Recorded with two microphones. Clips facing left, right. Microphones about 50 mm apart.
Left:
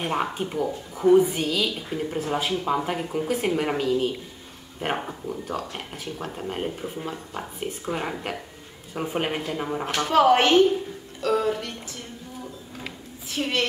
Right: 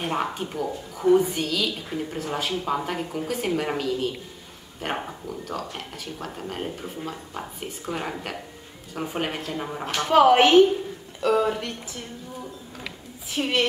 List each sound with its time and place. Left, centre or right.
0.0 s speech: centre
4.8 s speech: left
10.0 s a woman's voice: centre
11.5 s a woman's voice: centre
13.3 s a woman's voice: centre